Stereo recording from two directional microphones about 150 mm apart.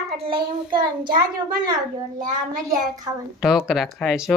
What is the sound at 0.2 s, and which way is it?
Child singing, 35° right (ahead or behind).